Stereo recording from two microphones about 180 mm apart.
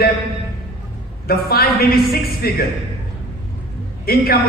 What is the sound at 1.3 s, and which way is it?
A man's voice, 60° left (ahead or behind).